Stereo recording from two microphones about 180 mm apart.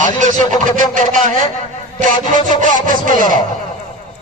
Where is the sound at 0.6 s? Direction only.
45° right (ahead or behind).